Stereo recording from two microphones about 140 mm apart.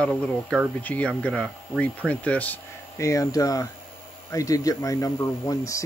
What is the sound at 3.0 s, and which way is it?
Speech, 25° left (ahead or behind).